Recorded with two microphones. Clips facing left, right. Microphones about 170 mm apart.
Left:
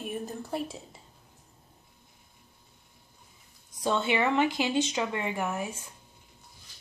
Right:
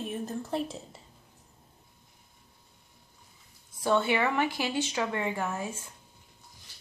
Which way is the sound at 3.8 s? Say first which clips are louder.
Right 1 dB; 20° left (ahead or behind).